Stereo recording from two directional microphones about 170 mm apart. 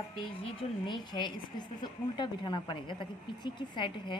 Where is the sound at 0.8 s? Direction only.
25° left (ahead or behind).